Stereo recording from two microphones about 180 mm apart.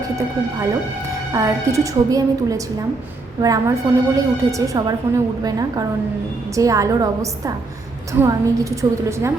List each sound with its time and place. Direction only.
1.3 s a woman's voice: 15° right (ahead or behind)